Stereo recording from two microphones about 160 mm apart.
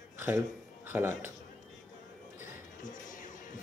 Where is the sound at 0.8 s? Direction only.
15° right (ahead or behind).